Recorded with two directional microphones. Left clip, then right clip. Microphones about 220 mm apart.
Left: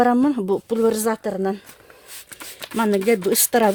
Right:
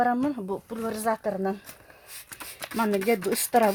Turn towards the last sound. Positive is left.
turn(degrees=45)  # may be behind; listen again after turning